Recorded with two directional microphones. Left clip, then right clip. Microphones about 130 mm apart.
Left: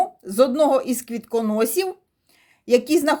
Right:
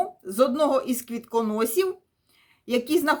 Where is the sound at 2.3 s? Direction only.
35° left (ahead or behind).